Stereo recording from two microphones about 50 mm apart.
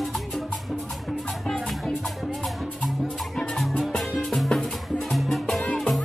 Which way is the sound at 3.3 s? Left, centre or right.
Centre.